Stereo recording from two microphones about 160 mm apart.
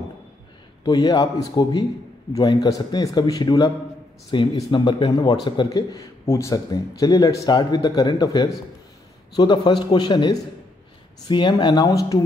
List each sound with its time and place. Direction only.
0.8 s a man's voice: 20° left (ahead or behind)